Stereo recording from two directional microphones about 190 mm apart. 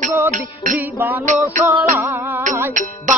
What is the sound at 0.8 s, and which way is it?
Music, 10° right (ahead or behind).